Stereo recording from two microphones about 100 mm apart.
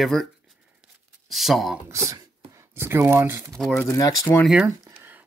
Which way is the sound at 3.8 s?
30° left (ahead or behind).